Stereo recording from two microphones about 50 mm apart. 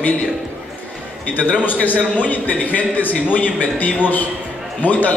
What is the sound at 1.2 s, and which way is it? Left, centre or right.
A man's voice, left.